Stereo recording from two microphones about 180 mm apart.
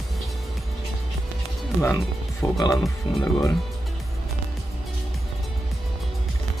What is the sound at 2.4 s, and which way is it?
Speech, 20° left (ahead or behind).